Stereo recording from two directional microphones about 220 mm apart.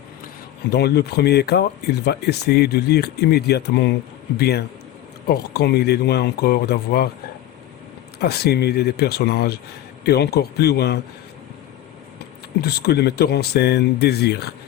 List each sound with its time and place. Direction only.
0.7 s speech: 45° left (ahead or behind)
8.2 s speech: 45° left (ahead or behind)
12.6 s speech: 45° left (ahead or behind)